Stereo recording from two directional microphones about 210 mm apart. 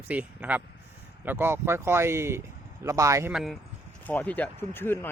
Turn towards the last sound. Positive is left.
turn(degrees=10)  # may be behind; listen again after turning